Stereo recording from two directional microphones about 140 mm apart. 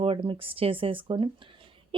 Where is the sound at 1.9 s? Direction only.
40° right (ahead or behind).